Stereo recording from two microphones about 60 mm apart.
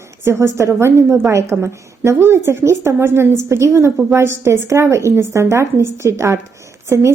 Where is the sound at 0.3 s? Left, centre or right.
Right.